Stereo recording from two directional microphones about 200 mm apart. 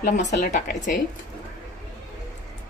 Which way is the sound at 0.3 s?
35° left (ahead or behind).